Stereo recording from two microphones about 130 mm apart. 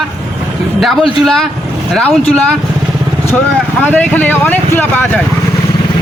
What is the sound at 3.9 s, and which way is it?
Speech, 10° left (ahead or behind).